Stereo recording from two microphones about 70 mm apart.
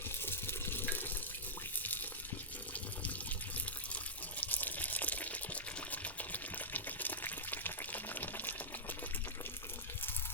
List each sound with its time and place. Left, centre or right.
0.3 s water: left
4.4 s water: left